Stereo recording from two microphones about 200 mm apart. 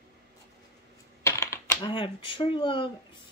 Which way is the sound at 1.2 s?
15° left (ahead or behind).